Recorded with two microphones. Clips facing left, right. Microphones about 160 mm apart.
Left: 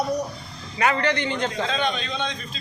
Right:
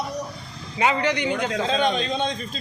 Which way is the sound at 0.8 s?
15° right (ahead or behind).